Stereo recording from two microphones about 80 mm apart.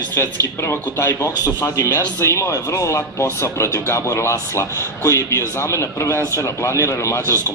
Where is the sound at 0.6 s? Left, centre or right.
Left.